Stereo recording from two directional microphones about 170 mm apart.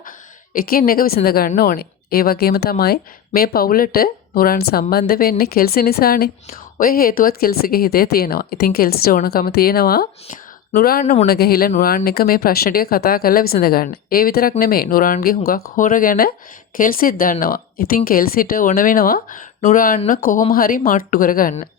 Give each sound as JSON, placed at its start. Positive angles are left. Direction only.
{"t": 0.5, "sound": "a woman's voice", "side_deg": 60}
{"t": 11.0, "sound": "speech", "side_deg": 40}
{"t": 11.3, "sound": "a woman's voice", "side_deg": 65}